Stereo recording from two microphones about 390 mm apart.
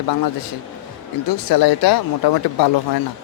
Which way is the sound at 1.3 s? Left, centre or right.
Left.